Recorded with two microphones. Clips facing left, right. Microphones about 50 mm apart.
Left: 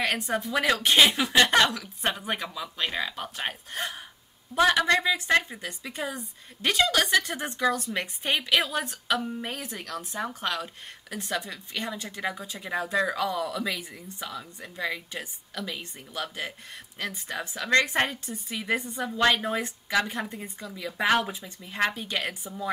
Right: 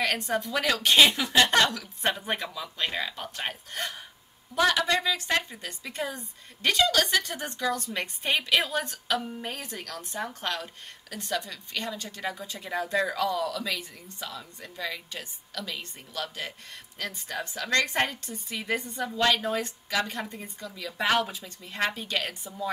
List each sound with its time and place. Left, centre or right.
0.0 s speech: centre
2.0 s a woman's voice: centre
3.7 s speech: left
5.9 s a woman's voice: centre
19.1 s a woman's voice: left